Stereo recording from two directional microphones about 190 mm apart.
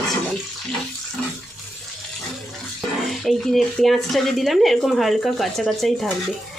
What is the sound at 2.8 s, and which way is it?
Speech, centre (ahead or behind).